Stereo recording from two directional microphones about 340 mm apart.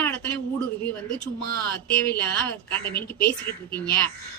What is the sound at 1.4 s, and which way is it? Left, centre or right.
Speech, left.